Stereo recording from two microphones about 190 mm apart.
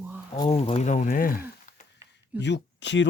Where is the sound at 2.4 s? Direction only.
70° left (ahead or behind).